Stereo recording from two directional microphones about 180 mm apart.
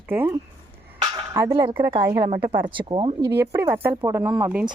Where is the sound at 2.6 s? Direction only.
25° right (ahead or behind); by 4.4 s 10° right (ahead or behind).